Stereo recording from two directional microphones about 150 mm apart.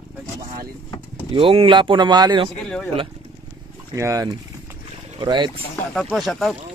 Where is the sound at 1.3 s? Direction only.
35° right (ahead or behind).